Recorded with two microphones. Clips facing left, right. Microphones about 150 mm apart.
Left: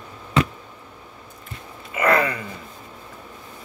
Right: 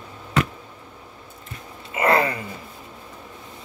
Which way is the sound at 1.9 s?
30° right (ahead or behind).